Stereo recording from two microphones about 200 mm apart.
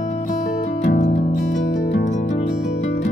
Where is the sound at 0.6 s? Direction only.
40° left (ahead or behind).